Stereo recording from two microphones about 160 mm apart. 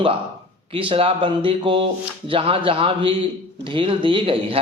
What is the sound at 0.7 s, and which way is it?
A man's voice, 35° right (ahead or behind).